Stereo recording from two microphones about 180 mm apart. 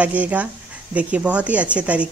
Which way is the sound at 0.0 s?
10° right (ahead or behind).